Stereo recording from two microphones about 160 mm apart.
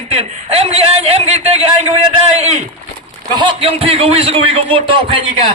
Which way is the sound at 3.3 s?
30° right (ahead or behind).